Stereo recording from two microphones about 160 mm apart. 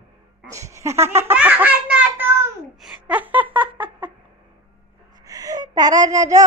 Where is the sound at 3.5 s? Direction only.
10° right (ahead or behind).